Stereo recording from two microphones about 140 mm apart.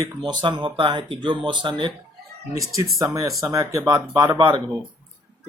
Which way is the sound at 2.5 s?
25° right (ahead or behind).